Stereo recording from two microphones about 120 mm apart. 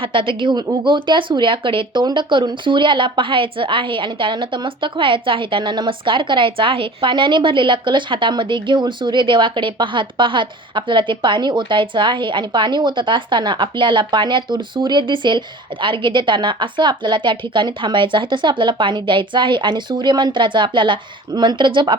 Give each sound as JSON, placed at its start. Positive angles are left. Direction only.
{"t": 0.0, "sound": "speech", "side_deg": -45}